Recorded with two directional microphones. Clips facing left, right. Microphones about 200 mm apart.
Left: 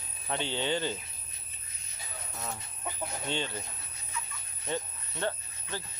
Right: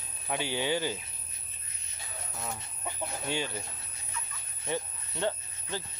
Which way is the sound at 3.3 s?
10° right (ahead or behind).